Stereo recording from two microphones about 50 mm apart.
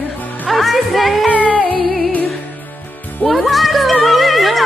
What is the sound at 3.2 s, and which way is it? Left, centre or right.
Music, centre.